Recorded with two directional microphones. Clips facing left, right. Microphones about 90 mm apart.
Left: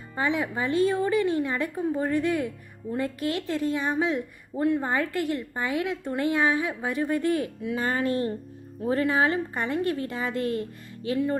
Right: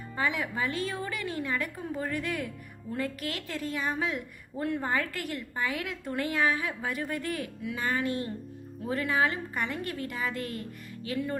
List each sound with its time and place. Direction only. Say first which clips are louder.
0.2 s a woman's voice: left 4 dB; 25° left (ahead or behind)